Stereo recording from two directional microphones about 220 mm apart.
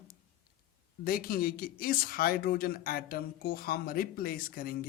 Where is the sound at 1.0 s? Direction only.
40° left (ahead or behind).